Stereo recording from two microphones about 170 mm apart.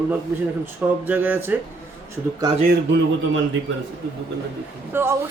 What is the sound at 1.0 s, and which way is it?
Speech, 10° right (ahead or behind).